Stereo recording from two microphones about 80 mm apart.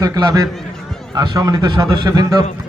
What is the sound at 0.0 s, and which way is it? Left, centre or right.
A man's voice, right.